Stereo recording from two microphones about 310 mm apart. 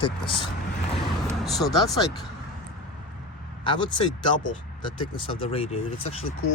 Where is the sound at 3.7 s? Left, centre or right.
Centre.